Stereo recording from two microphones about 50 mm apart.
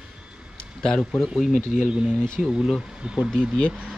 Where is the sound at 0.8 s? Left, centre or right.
Centre.